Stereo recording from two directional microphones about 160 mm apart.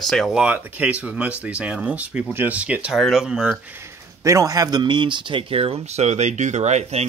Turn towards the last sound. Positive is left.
turn(degrees=-45)  # may be behind; listen again after turning